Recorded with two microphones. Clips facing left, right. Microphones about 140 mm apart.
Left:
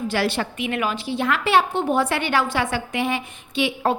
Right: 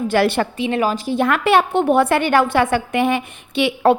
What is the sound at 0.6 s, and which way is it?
A woman's voice, 30° right (ahead or behind).